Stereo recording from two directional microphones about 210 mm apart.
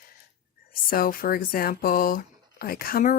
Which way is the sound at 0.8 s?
40° left (ahead or behind).